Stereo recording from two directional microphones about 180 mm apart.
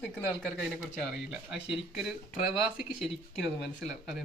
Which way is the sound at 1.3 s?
5° right (ahead or behind).